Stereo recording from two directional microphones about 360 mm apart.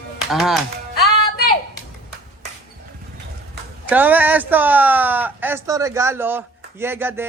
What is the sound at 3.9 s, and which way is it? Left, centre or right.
Speech, centre.